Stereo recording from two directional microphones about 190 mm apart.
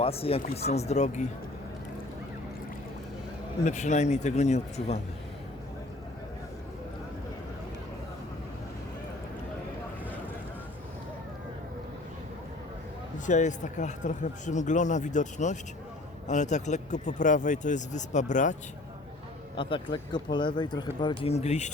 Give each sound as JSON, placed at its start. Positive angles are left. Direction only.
{"t": 0.0, "sound": "speech", "side_deg": 30}
{"t": 3.6, "sound": "speech", "side_deg": 40}
{"t": 13.1, "sound": "speech", "side_deg": 40}
{"t": 19.5, "sound": "speech", "side_deg": 25}